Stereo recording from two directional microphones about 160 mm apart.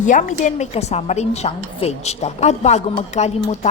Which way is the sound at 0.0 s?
50° left (ahead or behind).